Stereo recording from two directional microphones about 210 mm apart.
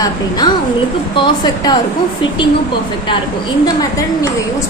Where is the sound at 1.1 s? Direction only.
20° left (ahead or behind).